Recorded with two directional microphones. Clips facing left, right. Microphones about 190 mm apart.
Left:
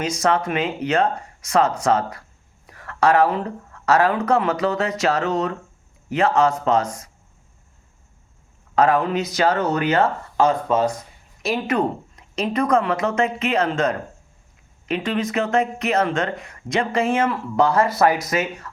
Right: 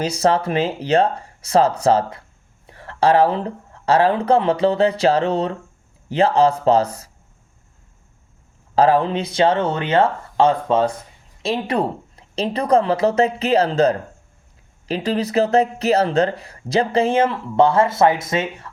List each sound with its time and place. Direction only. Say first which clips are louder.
0.0 s speech: right 3 dB; 30° right (ahead or behind)
8.7 s speech: right 2 dB; 30° right (ahead or behind)